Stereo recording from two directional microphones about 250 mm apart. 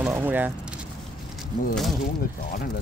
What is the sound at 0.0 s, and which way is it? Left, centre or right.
Speech, centre.